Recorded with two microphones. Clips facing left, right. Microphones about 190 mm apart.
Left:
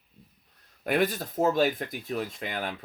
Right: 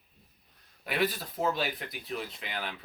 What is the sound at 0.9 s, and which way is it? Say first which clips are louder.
Speech: left 5 dB; 50° left (ahead or behind).